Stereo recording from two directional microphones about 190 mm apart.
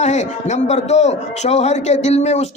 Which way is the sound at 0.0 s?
35° left (ahead or behind).